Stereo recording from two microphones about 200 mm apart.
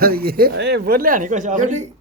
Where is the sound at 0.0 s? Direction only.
50° right (ahead or behind).